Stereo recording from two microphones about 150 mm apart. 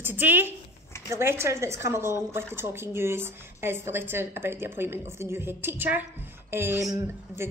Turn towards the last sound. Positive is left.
turn(degrees=-20)  # may be behind; listen again after turning